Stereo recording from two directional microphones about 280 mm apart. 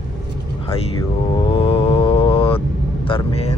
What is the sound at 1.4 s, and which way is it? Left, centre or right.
Mantra, centre.